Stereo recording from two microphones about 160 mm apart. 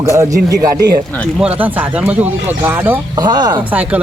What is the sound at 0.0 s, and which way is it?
Speech, 20° right (ahead or behind).